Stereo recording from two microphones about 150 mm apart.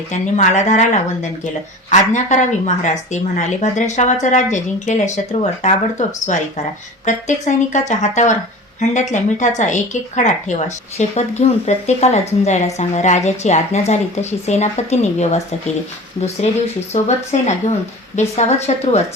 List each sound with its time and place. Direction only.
0.1 s speech: 50° left (ahead or behind)
16.9 s speech: 50° left (ahead or behind)